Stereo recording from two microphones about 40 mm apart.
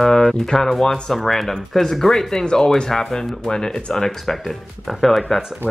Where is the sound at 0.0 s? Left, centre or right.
Centre.